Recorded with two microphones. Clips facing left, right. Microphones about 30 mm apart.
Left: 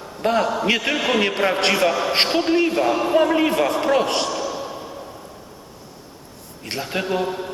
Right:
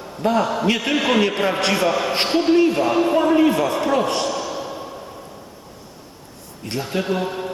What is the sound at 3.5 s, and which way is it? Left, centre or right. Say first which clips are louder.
Speech: left 1 dB; left.